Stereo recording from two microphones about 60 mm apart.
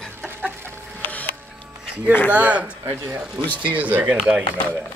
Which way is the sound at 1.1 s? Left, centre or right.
Left.